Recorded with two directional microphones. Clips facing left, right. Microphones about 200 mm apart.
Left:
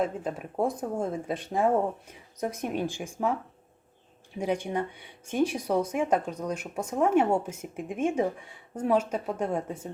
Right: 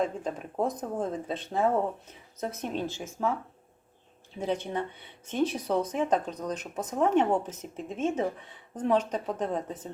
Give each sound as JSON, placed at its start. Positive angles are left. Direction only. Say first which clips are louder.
{"t": 0.0, "sound": "speech", "louder": "left 1 dB", "side_deg": 5}
{"t": 4.4, "sound": "speech", "louder": "left 2 dB", "side_deg": 10}